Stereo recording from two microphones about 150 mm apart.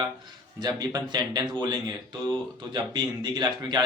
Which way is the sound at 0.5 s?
25° right (ahead or behind).